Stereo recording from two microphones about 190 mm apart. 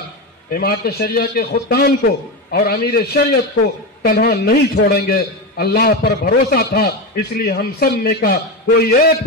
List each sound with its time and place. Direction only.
0.5 s a man's voice: 55° left (ahead or behind)